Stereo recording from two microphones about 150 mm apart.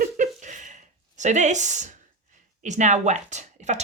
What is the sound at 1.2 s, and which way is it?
Speech, 50° right (ahead or behind).